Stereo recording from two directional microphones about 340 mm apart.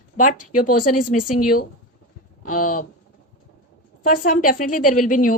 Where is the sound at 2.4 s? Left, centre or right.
Left.